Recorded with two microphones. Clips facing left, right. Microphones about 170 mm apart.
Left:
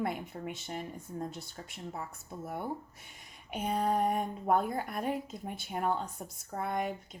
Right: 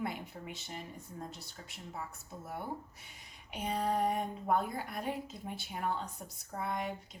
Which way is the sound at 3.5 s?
50° left (ahead or behind).